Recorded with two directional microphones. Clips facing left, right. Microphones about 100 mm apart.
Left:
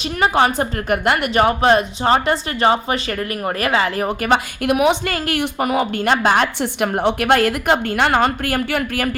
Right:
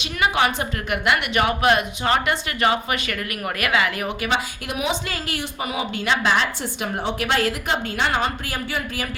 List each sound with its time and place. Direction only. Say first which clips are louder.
0.2 s a woman's voice: left 4 dB; 40° left (ahead or behind)
4.3 s a woman's voice: left 8 dB; 60° left (ahead or behind)